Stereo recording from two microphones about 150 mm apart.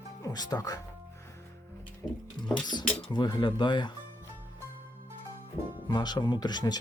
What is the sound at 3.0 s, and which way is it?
Speech, 30° left (ahead or behind).